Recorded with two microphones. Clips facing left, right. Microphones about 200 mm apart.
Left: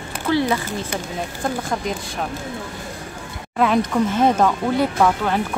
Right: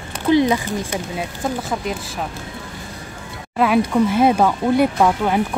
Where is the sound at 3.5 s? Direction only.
5° right (ahead or behind).